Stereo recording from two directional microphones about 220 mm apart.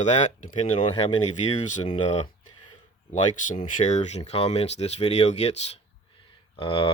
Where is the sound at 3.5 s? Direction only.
35° left (ahead or behind).